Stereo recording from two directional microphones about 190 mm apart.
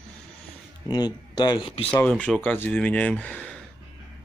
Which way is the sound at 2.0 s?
5° left (ahead or behind).